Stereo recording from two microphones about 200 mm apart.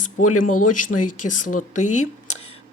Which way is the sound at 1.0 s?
40° left (ahead or behind).